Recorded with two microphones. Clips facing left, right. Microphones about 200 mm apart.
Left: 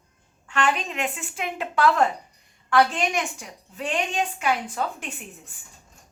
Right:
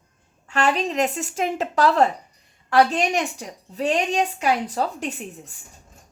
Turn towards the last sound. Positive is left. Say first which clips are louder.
# right 8 dB
turn(degrees=-40)  # may be behind; listen again after turning